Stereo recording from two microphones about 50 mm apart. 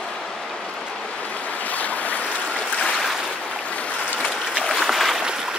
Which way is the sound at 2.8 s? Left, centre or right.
Centre.